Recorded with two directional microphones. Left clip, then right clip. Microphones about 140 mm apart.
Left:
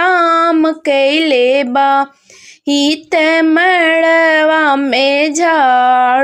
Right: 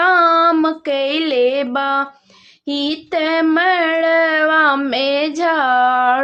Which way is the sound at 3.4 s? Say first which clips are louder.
Left 4 dB; 45° left (ahead or behind).